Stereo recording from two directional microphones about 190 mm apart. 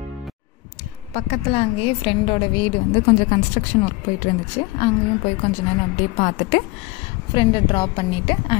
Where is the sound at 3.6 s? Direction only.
45° left (ahead or behind).